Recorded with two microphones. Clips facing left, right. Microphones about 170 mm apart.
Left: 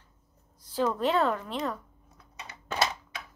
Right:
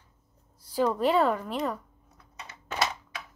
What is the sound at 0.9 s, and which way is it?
Speech, 10° right (ahead or behind).